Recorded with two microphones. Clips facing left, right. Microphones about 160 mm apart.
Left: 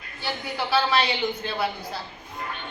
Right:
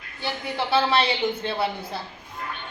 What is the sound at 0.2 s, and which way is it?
A man's voice, 25° right (ahead or behind).